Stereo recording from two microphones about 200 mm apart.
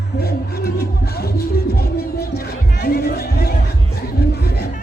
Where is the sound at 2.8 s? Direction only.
50° left (ahead or behind).